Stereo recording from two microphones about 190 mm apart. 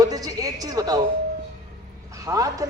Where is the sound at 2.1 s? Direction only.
20° right (ahead or behind).